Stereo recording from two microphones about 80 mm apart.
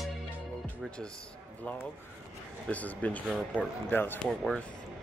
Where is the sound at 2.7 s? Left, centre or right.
Centre.